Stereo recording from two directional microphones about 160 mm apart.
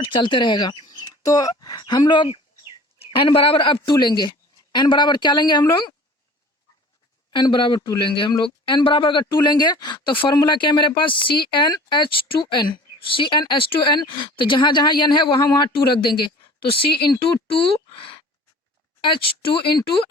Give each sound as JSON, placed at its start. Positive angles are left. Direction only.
{"t": 0.1, "sound": "speech", "side_deg": 30}
{"t": 7.3, "sound": "a woman's voice", "side_deg": 30}